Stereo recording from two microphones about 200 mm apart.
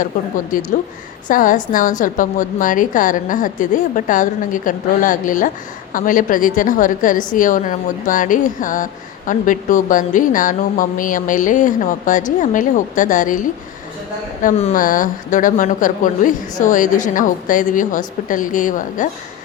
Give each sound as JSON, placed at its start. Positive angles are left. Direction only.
{"t": 0.5, "sound": "speech", "side_deg": 40}
{"t": 14.4, "sound": "speech", "side_deg": 40}